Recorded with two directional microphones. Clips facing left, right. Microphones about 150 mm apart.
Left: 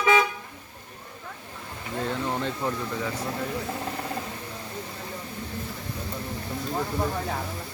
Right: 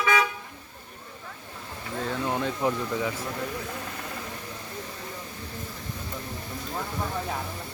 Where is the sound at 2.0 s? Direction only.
5° right (ahead or behind).